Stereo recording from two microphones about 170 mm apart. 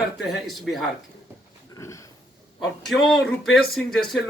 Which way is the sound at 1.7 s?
20° left (ahead or behind).